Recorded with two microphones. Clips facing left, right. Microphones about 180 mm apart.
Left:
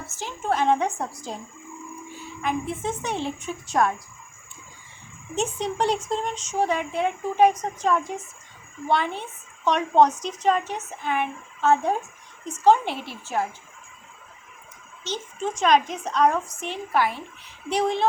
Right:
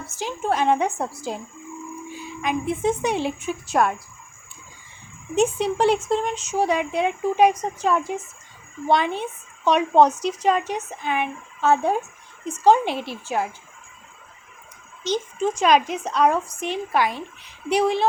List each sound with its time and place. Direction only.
0.2 s speech: 15° right (ahead or behind)
5.3 s speech: 10° right (ahead or behind)
6.7 s speech: 80° right
7.3 s speech: 10° right (ahead or behind)
15.0 s speech: 10° right (ahead or behind)